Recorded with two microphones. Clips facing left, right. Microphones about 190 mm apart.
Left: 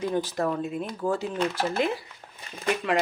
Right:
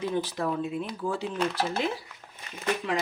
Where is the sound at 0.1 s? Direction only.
45° left (ahead or behind).